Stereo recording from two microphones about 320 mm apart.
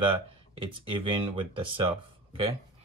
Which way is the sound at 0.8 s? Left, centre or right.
Centre.